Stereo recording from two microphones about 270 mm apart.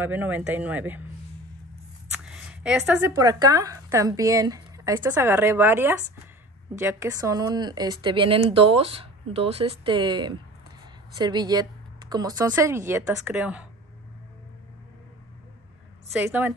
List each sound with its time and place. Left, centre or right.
0.0 s speech: centre
2.1 s a sound: centre
3.2 s speech: centre
16.2 s speech: centre